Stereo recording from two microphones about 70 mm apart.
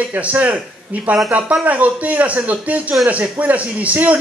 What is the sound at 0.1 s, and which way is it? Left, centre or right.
A man's voice, right.